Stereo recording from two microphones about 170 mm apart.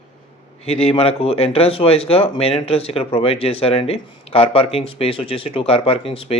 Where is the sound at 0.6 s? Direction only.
35° left (ahead or behind).